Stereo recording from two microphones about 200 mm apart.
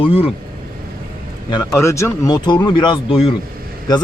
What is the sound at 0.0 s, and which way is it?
Speech, 30° left (ahead or behind).